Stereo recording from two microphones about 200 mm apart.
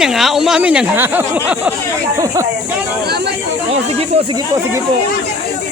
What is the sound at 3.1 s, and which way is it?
Speech, 55° right (ahead or behind).